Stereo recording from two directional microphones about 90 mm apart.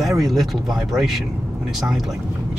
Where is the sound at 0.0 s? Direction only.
Centre (ahead or behind).